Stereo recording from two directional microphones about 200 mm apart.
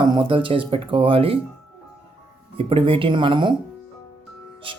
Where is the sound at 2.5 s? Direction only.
25° right (ahead or behind).